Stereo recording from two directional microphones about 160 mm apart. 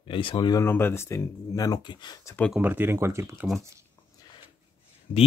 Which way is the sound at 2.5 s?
10° right (ahead or behind).